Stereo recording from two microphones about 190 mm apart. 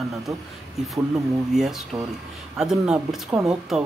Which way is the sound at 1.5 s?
Centre (ahead or behind).